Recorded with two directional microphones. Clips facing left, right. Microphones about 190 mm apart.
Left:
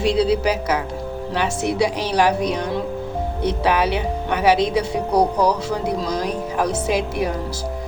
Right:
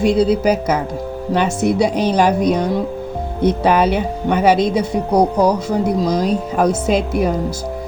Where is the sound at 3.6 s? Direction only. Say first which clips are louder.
Right 3 dB; 50° right (ahead or behind).